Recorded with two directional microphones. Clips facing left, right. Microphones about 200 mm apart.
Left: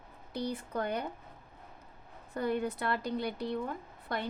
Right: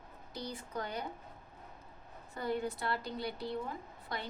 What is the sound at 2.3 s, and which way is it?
A woman's voice, 60° left (ahead or behind).